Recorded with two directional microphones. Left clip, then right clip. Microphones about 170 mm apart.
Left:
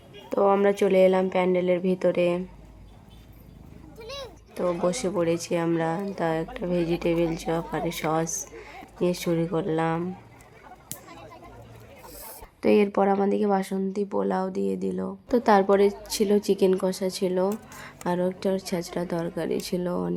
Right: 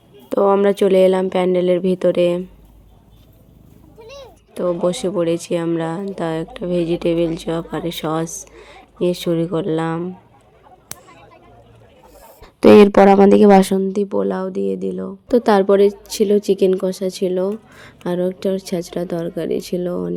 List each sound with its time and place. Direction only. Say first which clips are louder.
0.3 s speech: right 6 dB; 30° right (ahead or behind)
4.0 s a sound: even; 25° left (ahead or behind)
4.5 s a woman's voice: right 7 dB; 25° right (ahead or behind)
12.5 s speech: right 13 dB; 60° right (ahead or behind)
13.8 s a woman's voice: right 8 dB; 40° right (ahead or behind); by 20.1 s 20° right (ahead or behind)